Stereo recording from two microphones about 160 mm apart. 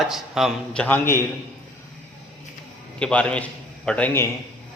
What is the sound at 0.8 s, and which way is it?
Speech, 15° left (ahead or behind).